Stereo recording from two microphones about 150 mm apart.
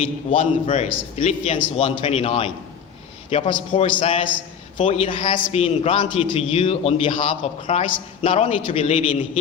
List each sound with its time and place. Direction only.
0.3 s a man's voice: 50° left (ahead or behind)
1.5 s a man's voice: 35° left (ahead or behind)